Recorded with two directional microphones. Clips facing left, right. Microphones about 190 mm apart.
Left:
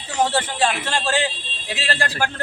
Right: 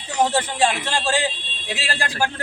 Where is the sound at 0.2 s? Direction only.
15° right (ahead or behind).